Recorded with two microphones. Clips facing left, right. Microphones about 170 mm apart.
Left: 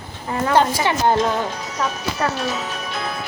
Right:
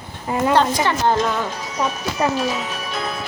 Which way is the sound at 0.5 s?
10° left (ahead or behind).